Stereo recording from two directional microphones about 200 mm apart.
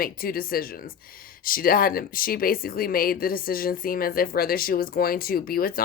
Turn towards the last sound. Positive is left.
turn(degrees=45)  # may be behind; listen again after turning